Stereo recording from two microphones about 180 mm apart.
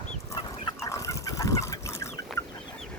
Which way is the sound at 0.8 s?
15° left (ahead or behind).